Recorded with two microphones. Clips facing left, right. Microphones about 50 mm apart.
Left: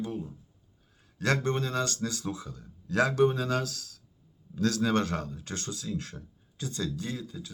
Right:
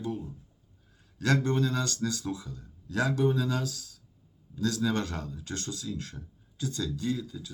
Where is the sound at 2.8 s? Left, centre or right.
Left.